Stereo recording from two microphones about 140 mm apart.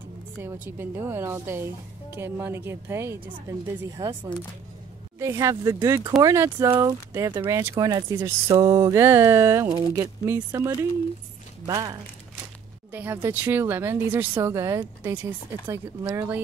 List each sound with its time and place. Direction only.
0.4 s speech: 15° right (ahead or behind)
5.2 s speech: 20° right (ahead or behind)
6.7 s speech: 35° right (ahead or behind)
7.1 s speech: 20° right (ahead or behind)
12.9 s speech: 15° right (ahead or behind)